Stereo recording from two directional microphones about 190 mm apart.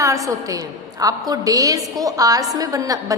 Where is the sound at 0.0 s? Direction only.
15° right (ahead or behind).